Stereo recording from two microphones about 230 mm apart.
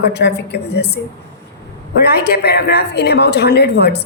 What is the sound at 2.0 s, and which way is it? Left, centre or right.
Speech, left.